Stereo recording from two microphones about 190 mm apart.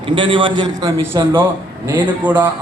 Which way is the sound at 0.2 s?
25° right (ahead or behind).